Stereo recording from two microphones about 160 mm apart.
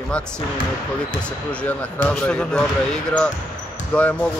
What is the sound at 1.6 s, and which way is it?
Speech, 5° left (ahead or behind).